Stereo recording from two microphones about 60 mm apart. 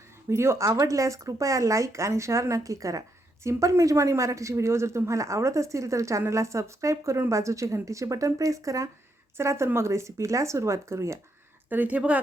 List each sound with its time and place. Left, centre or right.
0.3 s speech: right
0.7 s speech: right
9.4 s speech: right
11.7 s speech: right